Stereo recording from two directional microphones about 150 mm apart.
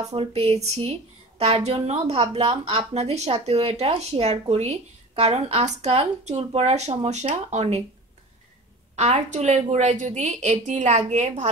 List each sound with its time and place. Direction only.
0.0 s speech: 45° right (ahead or behind)
8.9 s speech: 45° right (ahead or behind)